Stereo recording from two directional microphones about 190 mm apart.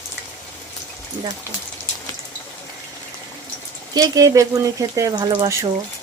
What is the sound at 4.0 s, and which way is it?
Speech, 20° right (ahead or behind).